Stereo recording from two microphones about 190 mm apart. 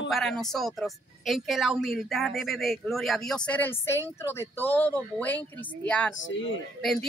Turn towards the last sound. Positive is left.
turn(degrees=0)  # may be behind; listen again after turning